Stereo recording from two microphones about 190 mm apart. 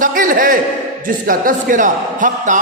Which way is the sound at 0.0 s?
45° right (ahead or behind).